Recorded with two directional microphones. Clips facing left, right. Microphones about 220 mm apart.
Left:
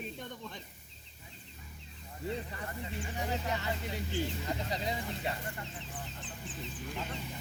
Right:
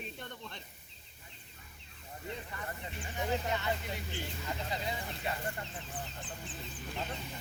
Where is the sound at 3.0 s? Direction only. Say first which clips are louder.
Right 3 dB; 35° left (ahead or behind).